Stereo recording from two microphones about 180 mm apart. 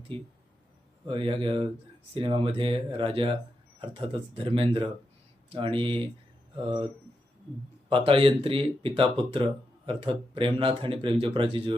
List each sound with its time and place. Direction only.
0.1 s speech: 30° right (ahead or behind)
7.9 s speech: 30° right (ahead or behind)